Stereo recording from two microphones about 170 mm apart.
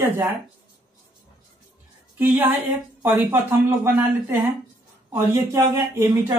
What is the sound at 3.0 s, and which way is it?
Speech, 10° right (ahead or behind).